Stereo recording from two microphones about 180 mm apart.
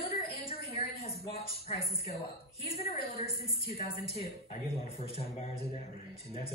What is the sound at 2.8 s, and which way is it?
A man's voice, 35° left (ahead or behind).